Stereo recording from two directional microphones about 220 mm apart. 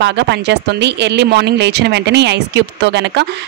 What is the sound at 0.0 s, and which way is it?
Speech, 50° right (ahead or behind).